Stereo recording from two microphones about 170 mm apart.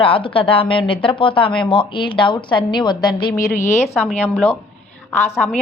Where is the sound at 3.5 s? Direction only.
45° left (ahead or behind).